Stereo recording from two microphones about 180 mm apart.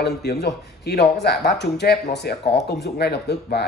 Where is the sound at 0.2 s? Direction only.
65° left (ahead or behind).